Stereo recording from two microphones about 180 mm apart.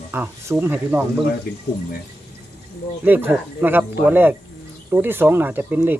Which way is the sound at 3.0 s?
10° right (ahead or behind).